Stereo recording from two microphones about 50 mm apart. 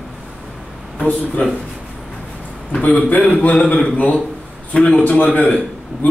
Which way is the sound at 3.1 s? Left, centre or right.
Left.